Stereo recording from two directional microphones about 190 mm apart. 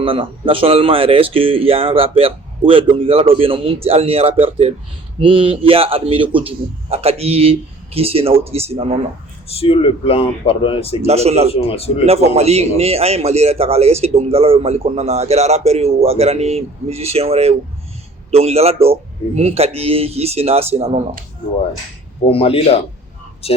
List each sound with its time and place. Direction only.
0.0 s a man's voice: 30° right (ahead or behind)
9.5 s speech: 30° left (ahead or behind)
11.0 s a man's voice: 35° right (ahead or behind)
11.5 s speech: 30° left (ahead or behind)
12.0 s a man's voice: 35° right (ahead or behind)
22.3 s speech: 30° left (ahead or behind)